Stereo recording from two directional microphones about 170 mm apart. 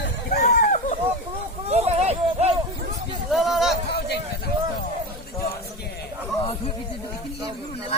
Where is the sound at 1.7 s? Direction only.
40° right (ahead or behind).